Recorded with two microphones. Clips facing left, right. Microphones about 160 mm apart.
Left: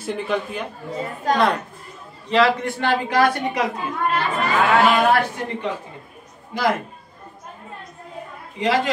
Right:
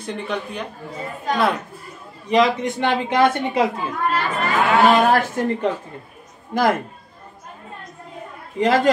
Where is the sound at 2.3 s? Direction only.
15° right (ahead or behind).